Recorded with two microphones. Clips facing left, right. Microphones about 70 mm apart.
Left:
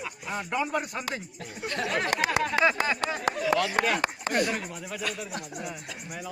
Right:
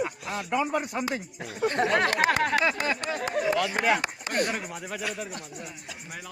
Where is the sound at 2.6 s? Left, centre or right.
Centre.